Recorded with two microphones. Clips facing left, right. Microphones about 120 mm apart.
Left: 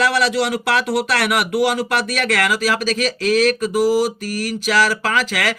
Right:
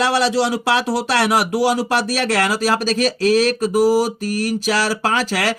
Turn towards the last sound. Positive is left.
turn(degrees=-35)  # may be behind; listen again after turning